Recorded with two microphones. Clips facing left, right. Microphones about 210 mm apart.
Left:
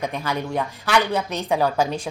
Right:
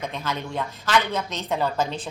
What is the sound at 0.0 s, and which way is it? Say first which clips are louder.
Speech: left 4 dB; 15° left (ahead or behind).